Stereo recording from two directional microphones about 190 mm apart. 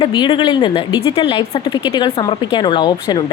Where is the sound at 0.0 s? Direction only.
25° left (ahead or behind).